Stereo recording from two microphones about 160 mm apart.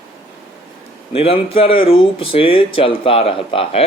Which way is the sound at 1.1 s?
35° left (ahead or behind).